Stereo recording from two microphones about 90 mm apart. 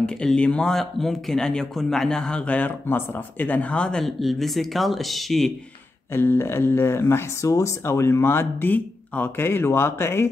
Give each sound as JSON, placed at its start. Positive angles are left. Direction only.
{"t": 0.0, "sound": "speech", "side_deg": 10}
{"t": 6.1, "sound": "speech", "side_deg": 25}